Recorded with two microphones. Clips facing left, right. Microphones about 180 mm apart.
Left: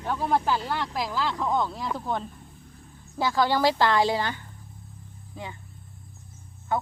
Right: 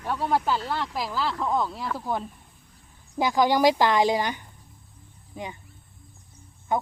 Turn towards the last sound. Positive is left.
turn(degrees=-15)  # may be behind; listen again after turning